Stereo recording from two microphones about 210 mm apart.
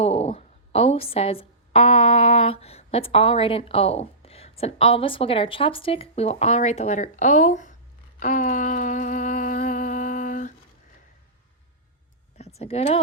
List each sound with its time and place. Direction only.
0.0 s a woman's voice: 30° left (ahead or behind)
8.2 s humming: 35° left (ahead or behind)
12.4 s speech: 30° left (ahead or behind)